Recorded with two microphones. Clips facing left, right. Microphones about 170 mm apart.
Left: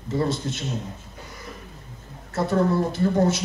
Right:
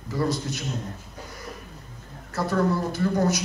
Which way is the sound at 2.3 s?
25° left (ahead or behind).